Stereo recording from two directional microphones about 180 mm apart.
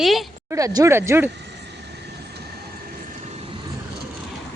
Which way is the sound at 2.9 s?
40° right (ahead or behind).